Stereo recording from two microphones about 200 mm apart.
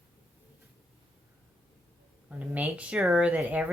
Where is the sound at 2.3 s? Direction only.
5° right (ahead or behind).